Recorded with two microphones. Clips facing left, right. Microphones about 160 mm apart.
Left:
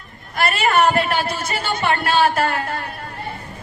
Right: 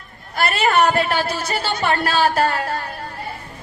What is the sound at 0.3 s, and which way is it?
A woman's voice, 30° right (ahead or behind).